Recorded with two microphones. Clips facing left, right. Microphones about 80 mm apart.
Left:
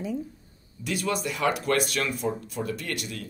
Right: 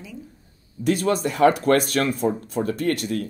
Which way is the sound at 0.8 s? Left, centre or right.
Right.